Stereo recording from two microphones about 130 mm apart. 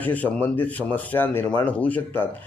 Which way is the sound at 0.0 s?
10° left (ahead or behind).